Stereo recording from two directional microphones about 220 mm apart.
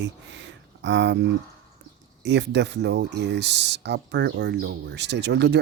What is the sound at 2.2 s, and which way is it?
Speech, 50° right (ahead or behind).